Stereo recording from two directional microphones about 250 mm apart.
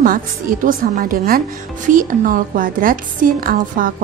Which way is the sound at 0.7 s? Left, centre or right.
Right.